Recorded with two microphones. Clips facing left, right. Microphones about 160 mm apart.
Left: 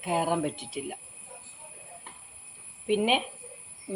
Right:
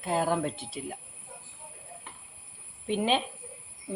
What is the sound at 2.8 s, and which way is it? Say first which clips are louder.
Speech: left 2 dB; 15° left (ahead or behind).